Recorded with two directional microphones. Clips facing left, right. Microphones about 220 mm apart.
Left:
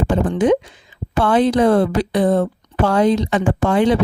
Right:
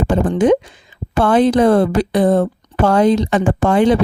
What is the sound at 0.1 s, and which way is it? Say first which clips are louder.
Speech: right 3 dB; 45° right (ahead or behind).